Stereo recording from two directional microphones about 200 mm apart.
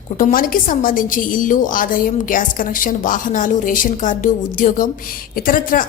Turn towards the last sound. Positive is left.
turn(degrees=45)  # may be behind; listen again after turning